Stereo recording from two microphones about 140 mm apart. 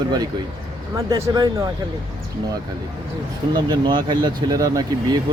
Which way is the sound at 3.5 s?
30° right (ahead or behind).